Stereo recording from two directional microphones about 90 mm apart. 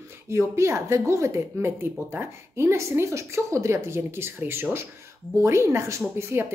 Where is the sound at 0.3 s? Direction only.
30° right (ahead or behind).